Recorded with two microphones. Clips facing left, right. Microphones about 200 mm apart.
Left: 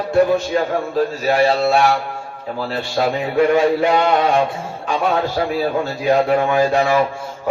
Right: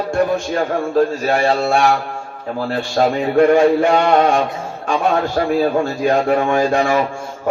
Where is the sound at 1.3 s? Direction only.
50° right (ahead or behind).